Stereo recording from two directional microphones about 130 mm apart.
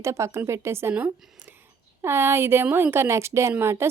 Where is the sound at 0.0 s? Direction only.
20° right (ahead or behind).